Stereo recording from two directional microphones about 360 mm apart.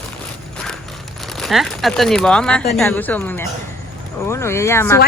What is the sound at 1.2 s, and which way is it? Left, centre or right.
Speech, centre.